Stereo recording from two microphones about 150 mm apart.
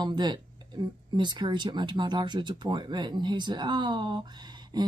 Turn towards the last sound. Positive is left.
turn(degrees=-25)  # may be behind; listen again after turning